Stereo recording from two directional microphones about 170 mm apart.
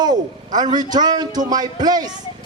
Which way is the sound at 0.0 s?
25° right (ahead or behind).